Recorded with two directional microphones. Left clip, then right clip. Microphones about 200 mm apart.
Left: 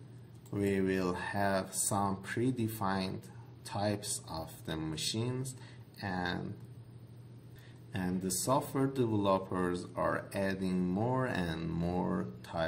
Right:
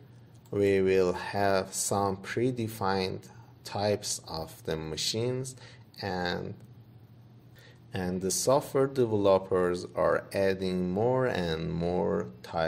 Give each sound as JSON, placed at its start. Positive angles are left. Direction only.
{"t": 0.5, "sound": "speech", "side_deg": -40}
{"t": 7.9, "sound": "speech", "side_deg": -40}